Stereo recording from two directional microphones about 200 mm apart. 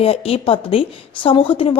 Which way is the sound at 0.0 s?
30° left (ahead or behind).